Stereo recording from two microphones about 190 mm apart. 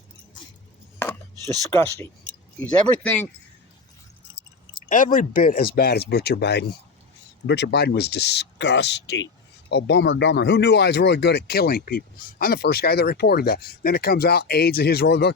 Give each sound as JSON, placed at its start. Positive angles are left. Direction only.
{"t": 1.7, "sound": "speech", "side_deg": 10}
{"t": 4.9, "sound": "speech", "side_deg": 45}